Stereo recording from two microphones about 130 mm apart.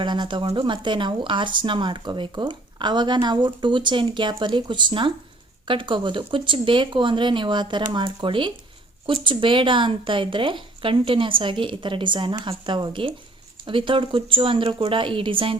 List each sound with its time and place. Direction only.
0.0 s speech: 35° right (ahead or behind)